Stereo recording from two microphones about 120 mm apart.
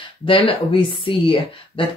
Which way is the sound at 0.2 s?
45° left (ahead or behind).